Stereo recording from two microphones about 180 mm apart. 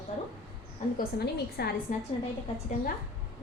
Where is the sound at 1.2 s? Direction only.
60° left (ahead or behind).